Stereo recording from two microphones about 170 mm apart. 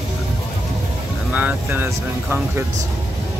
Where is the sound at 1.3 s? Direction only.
10° right (ahead or behind).